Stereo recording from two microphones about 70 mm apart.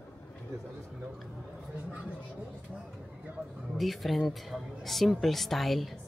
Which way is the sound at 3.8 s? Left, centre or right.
Centre.